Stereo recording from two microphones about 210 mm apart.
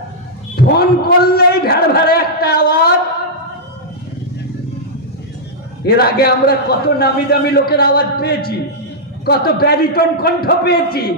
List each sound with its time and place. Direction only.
0.6 s a man's voice: 50° left (ahead or behind)
5.9 s a man's voice: 50° left (ahead or behind)